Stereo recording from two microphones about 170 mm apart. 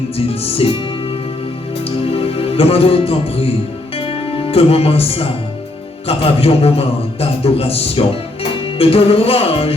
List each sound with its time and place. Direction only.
0.4 s a man's voice: 35° left (ahead or behind)
2.0 s music: 35° left (ahead or behind)
6.1 s a man's voice: 35° left (ahead or behind)